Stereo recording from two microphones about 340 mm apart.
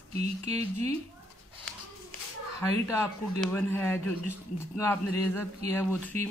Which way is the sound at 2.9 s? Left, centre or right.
Centre.